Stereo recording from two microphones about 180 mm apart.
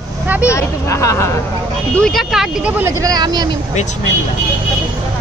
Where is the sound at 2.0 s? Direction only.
Centre (ahead or behind).